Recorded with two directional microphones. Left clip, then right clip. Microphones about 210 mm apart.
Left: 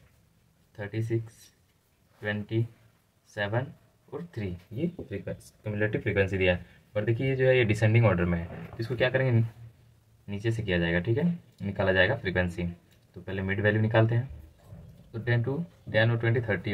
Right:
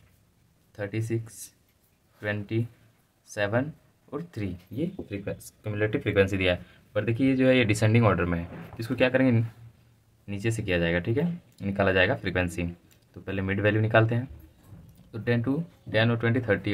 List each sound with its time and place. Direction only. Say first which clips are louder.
0.7 s speech: right 3 dB; 45° right (ahead or behind)
4.1 s speech: right 2 dB; 45° right (ahead or behind)
5.1 s speech: right 2 dB; 30° right (ahead or behind)